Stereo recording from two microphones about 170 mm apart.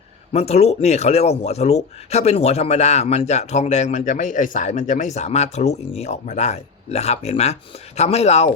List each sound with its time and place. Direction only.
0.3 s speech: 40° left (ahead or behind)